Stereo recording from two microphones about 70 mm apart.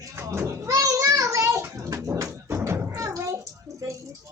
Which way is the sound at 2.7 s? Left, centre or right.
Right.